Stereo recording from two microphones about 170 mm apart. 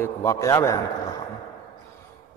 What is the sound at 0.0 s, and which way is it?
Speech, 15° left (ahead or behind).